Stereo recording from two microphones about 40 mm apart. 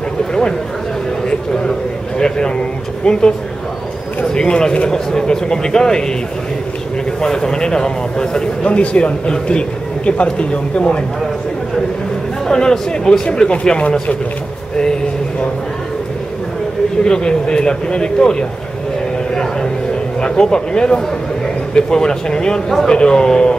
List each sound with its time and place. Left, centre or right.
0.3 s a sound: left
2.1 s a sound: centre
3.1 s speech: centre
7.2 s speech: centre
8.6 s speech: left
12.4 s speech: centre
17.0 s speech: centre
20.2 s speech: centre